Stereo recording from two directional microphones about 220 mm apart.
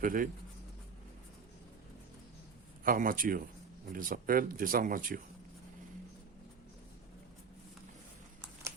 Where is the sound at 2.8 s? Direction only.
40° right (ahead or behind).